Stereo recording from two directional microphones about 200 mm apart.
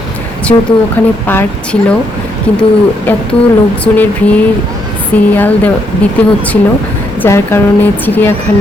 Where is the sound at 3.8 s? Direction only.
10° left (ahead or behind).